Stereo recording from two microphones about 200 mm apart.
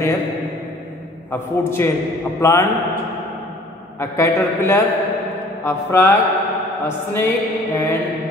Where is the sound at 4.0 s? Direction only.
15° left (ahead or behind).